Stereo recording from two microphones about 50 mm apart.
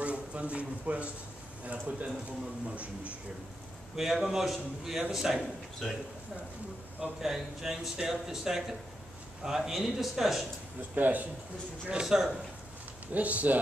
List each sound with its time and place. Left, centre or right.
0.0 s a man's voice: right
3.9 s a man's voice: centre
7.2 s speech: centre
10.8 s speech: right
11.9 s speech: centre
13.1 s speech: right